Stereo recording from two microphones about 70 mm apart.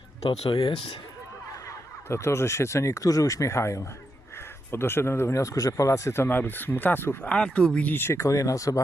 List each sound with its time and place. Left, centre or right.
2.0 s speech: left
7.3 s speech: centre
7.9 s speech: left